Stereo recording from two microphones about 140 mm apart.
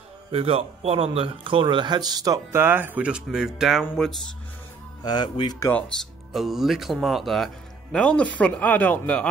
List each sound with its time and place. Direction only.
0.3 s speech: 40° right (ahead or behind); by 4.1 s 5° left (ahead or behind)
5.0 s speech: 30° left (ahead or behind)
5.6 s speech: 10° left (ahead or behind)
6.3 s speech: centre (ahead or behind)